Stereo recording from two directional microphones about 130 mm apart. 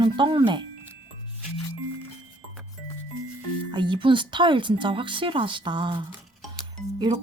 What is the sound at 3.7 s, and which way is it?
Speech, 35° right (ahead or behind).